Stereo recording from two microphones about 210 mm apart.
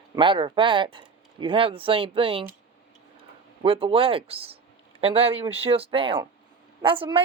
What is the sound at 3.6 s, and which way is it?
Speech, 25° right (ahead or behind).